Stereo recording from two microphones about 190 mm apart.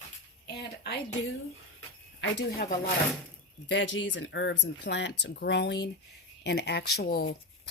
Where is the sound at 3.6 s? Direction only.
75° left (ahead or behind).